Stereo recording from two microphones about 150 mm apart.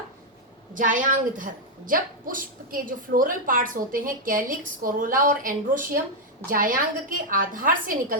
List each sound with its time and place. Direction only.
0.7 s a woman's voice: 65° right (ahead or behind)